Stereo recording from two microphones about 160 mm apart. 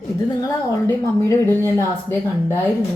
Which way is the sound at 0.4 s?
15° left (ahead or behind).